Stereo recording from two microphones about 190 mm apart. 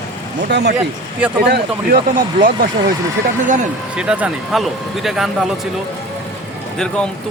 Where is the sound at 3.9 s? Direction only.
5° right (ahead or behind).